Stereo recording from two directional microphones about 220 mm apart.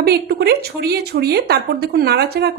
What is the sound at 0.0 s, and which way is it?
Speech, 45° right (ahead or behind).